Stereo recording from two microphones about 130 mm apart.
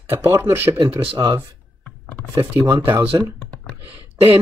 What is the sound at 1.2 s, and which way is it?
Speech, 30° right (ahead or behind).